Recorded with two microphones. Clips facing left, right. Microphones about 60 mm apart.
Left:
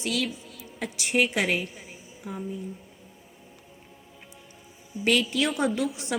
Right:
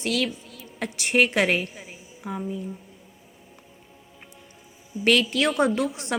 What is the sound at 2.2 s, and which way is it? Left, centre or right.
Speech, right.